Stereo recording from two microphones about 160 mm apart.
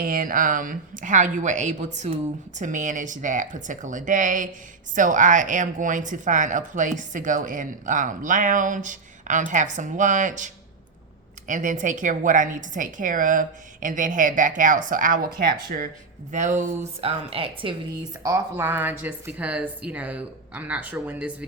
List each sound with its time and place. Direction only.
0.0 s speech: 60° right (ahead or behind)
16.3 s speech: 50° right (ahead or behind); by 17.7 s 35° right (ahead or behind)
18.2 s speech: 20° right (ahead or behind)